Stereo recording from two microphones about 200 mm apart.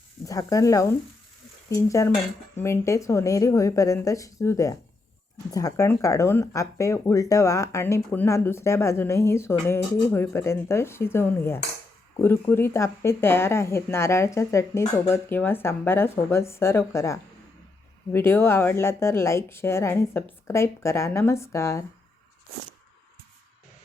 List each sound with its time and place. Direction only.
0.3 s speech: 15° left (ahead or behind)